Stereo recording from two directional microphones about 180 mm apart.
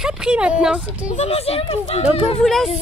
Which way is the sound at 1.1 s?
35° left (ahead or behind).